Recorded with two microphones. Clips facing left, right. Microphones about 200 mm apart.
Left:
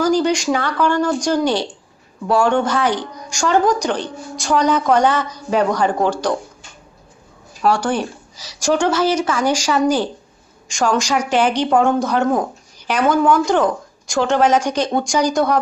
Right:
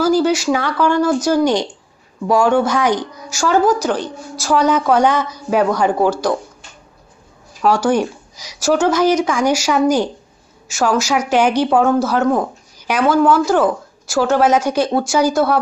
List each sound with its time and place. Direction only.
0.0 s speech: 5° right (ahead or behind)
7.6 s speech: 10° right (ahead or behind)